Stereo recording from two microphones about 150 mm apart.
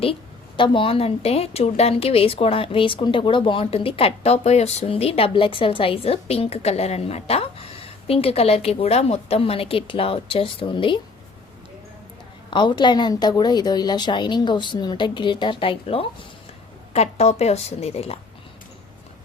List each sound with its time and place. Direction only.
0.0 s a woman's voice: 35° left (ahead or behind)
12.5 s a woman's voice: 30° left (ahead or behind)